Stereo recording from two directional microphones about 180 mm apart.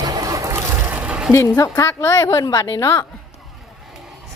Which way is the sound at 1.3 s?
20° left (ahead or behind).